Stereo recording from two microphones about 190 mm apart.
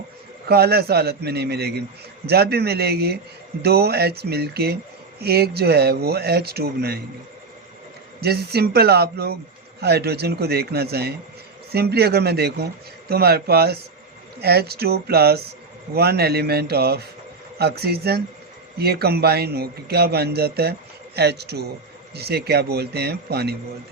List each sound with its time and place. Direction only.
0.4 s a man's voice: 55° right (ahead or behind)
8.2 s a man's voice: 55° right (ahead or behind)